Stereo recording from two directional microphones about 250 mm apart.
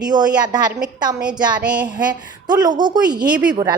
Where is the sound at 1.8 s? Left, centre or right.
Centre.